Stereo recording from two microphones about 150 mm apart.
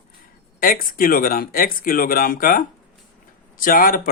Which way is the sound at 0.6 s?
70° left (ahead or behind).